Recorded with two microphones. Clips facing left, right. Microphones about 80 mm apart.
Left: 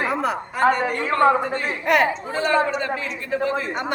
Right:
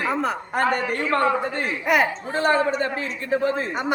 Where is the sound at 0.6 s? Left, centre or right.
Right.